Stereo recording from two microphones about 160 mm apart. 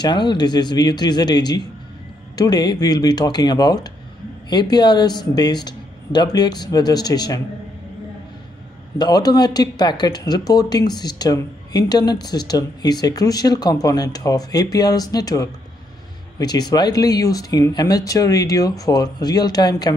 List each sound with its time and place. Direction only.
0.0 s speech: 30° left (ahead or behind)
8.9 s speech: 25° left (ahead or behind)